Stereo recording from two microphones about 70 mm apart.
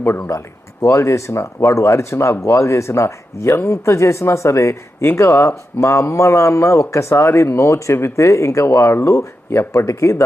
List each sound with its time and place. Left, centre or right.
0.0 s speech: left